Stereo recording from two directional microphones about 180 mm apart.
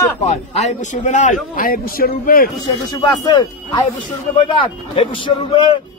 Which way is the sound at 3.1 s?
20° left (ahead or behind).